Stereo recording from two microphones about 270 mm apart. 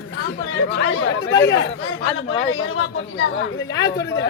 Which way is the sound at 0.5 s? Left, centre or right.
Left.